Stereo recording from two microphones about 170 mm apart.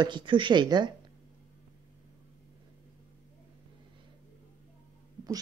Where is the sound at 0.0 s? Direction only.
25° right (ahead or behind).